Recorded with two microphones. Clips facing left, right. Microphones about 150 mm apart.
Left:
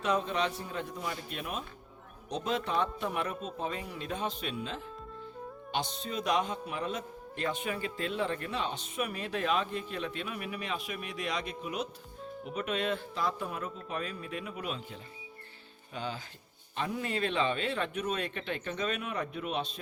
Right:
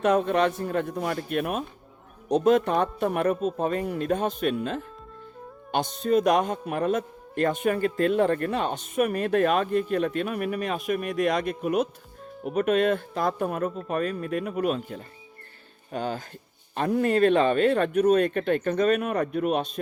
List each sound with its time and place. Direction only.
0.0 s a man's voice: 55° right (ahead or behind)